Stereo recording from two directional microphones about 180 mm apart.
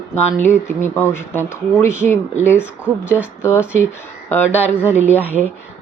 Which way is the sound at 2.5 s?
5° right (ahead or behind).